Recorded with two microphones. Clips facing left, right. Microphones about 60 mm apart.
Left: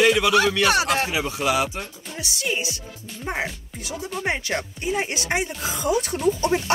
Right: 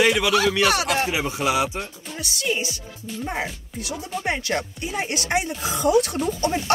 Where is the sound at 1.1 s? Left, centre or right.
Right.